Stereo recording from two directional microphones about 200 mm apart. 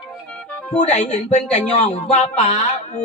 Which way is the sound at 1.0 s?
35° left (ahead or behind).